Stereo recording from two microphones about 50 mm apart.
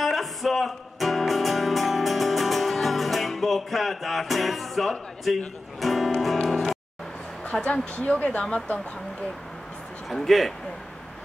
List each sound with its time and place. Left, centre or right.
0.0 s music: centre
5.8 s speech: centre
6.4 s music: centre
7.6 s speech: left
10.0 s speech: centre